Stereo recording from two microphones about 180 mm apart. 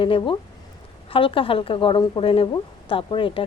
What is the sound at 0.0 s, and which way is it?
A woman's voice, 30° left (ahead or behind).